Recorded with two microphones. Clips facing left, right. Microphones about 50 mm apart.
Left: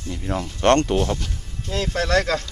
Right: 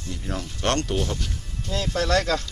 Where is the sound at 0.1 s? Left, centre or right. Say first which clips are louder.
Left 5 dB; centre.